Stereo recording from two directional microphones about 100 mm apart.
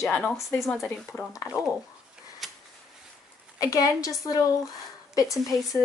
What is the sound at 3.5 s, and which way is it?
Speech, 35° left (ahead or behind).